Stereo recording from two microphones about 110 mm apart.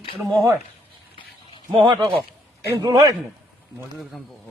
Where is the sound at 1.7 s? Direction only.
45° right (ahead or behind).